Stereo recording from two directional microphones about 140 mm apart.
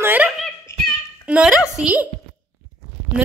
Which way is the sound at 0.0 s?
15° right (ahead or behind).